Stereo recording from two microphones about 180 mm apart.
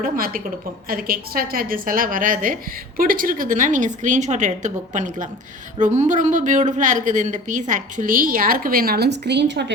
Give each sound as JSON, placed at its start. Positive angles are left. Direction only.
{"t": 0.0, "sound": "speech", "side_deg": -50}